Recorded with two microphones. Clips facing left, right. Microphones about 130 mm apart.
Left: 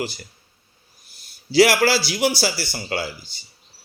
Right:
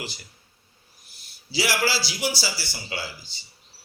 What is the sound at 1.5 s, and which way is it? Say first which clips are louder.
A man's voice: left 9 dB; 60° left (ahead or behind).